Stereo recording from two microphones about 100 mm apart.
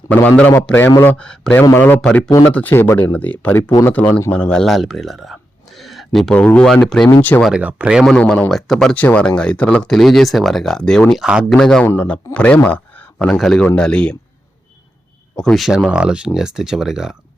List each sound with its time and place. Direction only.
0.1 s speech: 15° left (ahead or behind)
1.7 s a man's voice: 20° left (ahead or behind)
2.0 s speech: 10° left (ahead or behind)
6.3 s speech: 15° left (ahead or behind)
7.2 s speech: 15° left (ahead or behind)
7.5 s speech: 15° right (ahead or behind)
8.3 s speech: 5° left (ahead or behind)
11.1 s speech: 5° right (ahead or behind)
11.4 s speech: 5° left (ahead or behind)
13.1 s speech: 5° left (ahead or behind)
15.4 s speech: 5° left (ahead or behind)